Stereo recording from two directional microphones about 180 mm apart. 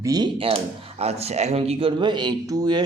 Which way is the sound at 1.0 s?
35° right (ahead or behind).